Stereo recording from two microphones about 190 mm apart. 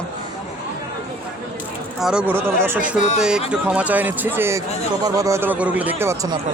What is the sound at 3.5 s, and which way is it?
Speech, 5° right (ahead or behind).